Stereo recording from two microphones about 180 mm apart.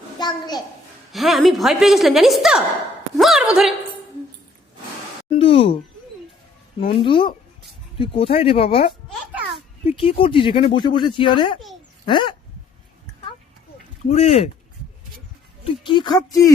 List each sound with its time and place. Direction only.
0.2 s a child's voice: 25° left (ahead or behind)
1.1 s a woman's voice: centre (ahead or behind)
3.2 s a sound: 5° right (ahead or behind)
5.4 s speech: 30° left (ahead or behind)
6.7 s speech: 30° left (ahead or behind)
14.1 s speech: 35° left (ahead or behind)
15.6 s speech: 25° left (ahead or behind)